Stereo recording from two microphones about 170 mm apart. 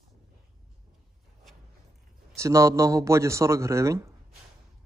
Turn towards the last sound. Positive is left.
turn(degrees=-15)  # may be behind; listen again after turning